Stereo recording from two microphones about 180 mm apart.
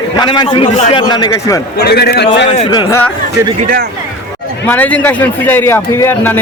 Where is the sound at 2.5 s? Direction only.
35° left (ahead or behind).